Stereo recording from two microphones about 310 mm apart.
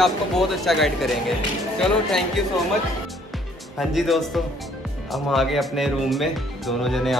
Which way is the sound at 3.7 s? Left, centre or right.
Centre.